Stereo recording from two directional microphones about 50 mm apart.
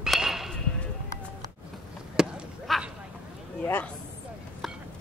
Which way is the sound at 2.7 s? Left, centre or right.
Centre.